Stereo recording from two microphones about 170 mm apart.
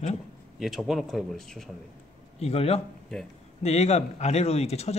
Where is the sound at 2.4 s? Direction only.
35° left (ahead or behind).